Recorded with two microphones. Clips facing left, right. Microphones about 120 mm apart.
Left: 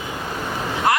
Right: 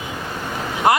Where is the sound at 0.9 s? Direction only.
20° right (ahead or behind).